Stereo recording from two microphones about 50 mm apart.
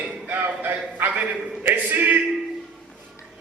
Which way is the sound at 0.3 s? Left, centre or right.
Right.